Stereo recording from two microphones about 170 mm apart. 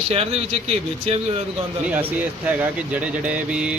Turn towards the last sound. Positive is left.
turn(degrees=-5)  # may be behind; listen again after turning